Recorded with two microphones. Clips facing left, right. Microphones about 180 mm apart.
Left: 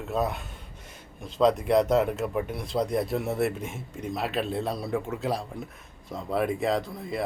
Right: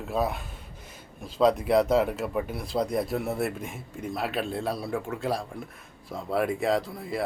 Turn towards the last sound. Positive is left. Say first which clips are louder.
# right 1 dB
turn(degrees=0)  # may be behind; listen again after turning